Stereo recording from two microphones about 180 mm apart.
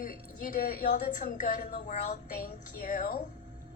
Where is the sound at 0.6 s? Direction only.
55° left (ahead or behind).